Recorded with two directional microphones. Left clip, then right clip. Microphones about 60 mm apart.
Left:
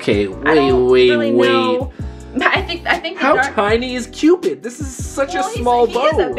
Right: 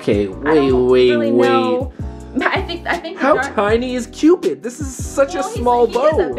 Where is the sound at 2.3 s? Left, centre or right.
Centre.